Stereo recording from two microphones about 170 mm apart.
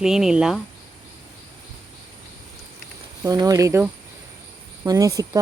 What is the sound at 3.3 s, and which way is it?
Speech, 20° right (ahead or behind).